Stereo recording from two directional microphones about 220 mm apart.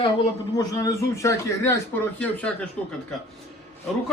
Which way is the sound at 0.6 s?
15° left (ahead or behind).